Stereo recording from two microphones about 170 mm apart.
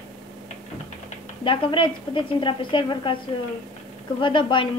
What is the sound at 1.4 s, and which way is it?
A woman's voice, 30° left (ahead or behind).